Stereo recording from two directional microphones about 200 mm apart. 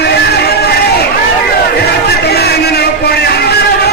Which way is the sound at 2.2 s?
55° left (ahead or behind).